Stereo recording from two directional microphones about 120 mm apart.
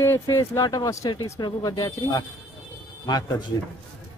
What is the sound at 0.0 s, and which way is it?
Speech, 25° left (ahead or behind).